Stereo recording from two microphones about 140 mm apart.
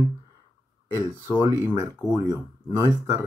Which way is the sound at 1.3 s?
30° right (ahead or behind).